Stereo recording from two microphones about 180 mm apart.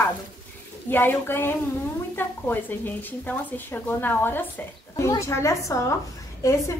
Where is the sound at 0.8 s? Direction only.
10° left (ahead or behind).